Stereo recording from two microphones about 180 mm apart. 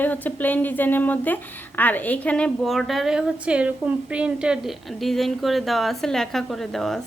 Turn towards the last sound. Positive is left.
turn(degrees=0)  # may be behind; listen again after turning